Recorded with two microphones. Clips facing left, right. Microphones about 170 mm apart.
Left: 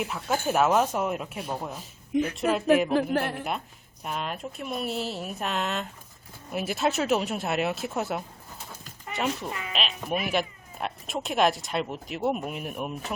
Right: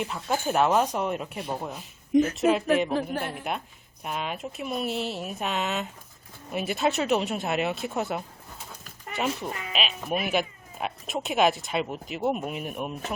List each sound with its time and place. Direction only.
0.0 s speech: centre (ahead or behind)
2.9 s a man's voice: 65° left (ahead or behind)
4.0 s speech: centre (ahead or behind)